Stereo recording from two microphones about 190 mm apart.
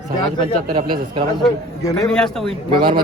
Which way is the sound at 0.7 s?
25° right (ahead or behind).